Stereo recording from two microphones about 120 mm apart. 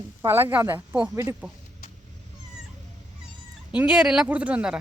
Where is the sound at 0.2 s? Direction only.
20° right (ahead or behind).